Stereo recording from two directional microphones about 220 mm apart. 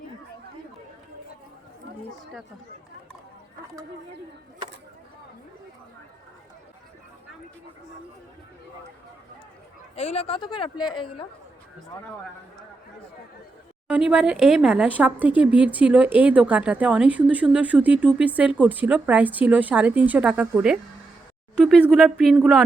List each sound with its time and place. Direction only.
9.9 s speech: 30° left (ahead or behind)
13.8 s speech: 5° right (ahead or behind)